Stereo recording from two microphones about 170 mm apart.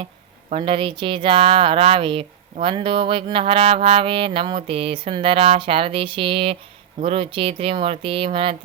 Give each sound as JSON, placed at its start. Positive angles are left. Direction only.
{"t": 0.5, "sound": "speech", "side_deg": -30}